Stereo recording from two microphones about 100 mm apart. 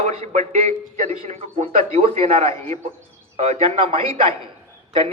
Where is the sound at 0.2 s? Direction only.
85° right.